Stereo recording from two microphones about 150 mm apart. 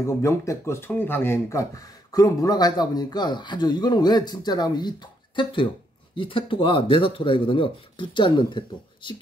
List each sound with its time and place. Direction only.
0.0 s speech: 20° left (ahead or behind)